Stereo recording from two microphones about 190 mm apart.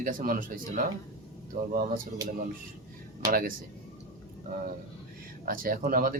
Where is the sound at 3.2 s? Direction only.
50° right (ahead or behind).